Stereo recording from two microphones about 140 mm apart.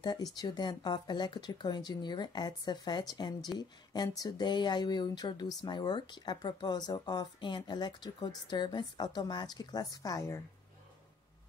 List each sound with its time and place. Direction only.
0.0 s speech: 30° left (ahead or behind)